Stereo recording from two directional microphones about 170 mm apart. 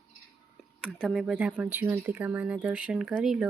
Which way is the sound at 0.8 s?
5° right (ahead or behind).